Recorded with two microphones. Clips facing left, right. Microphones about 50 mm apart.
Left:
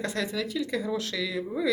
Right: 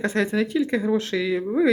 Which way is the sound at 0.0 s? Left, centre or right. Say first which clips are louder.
Right 8 dB; right.